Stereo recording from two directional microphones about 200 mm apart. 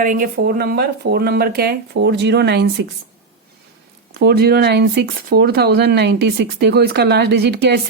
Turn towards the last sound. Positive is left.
turn(degrees=-55)  # may be behind; listen again after turning